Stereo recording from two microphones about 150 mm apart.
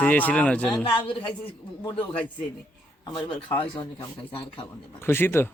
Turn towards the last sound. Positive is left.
turn(degrees=15)  # may be behind; listen again after turning